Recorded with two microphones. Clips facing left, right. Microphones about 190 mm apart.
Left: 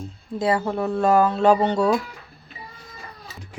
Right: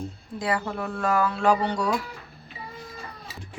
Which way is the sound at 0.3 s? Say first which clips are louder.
Left 6 dB; 25° left (ahead or behind).